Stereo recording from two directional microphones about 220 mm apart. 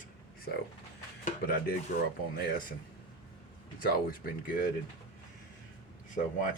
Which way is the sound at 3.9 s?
40° left (ahead or behind).